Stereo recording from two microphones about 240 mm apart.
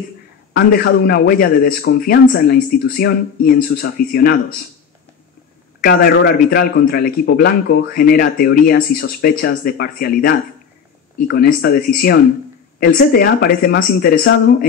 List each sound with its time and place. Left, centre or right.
0.5 s a man's voice: left
5.8 s a man's voice: left